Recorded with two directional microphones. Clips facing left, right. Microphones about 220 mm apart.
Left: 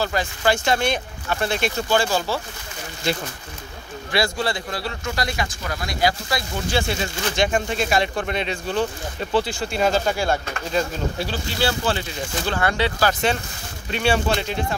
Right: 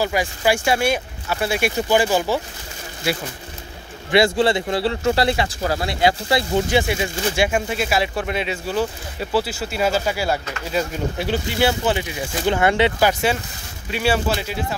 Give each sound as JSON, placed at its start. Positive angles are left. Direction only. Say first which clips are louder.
{"t": 0.0, "sound": "speech", "louder": "right 2 dB", "side_deg": -10}
{"t": 4.1, "sound": "speech", "louder": "right 7 dB", "side_deg": -25}
{"t": 11.2, "sound": "speech", "louder": "right 7 dB", "side_deg": -20}
{"t": 13.8, "sound": "speech", "louder": "right 1 dB", "side_deg": -5}